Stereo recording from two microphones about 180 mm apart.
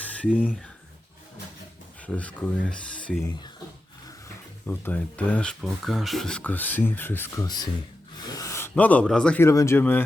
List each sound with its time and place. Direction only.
2.1 s speech: 5° left (ahead or behind)
4.6 s speech: 5° left (ahead or behind)
7.4 s speech: 20° left (ahead or behind)